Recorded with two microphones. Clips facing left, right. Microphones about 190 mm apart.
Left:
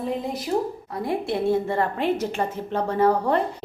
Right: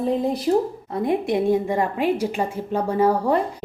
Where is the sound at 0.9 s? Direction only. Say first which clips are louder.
Right 5 dB; 20° right (ahead or behind).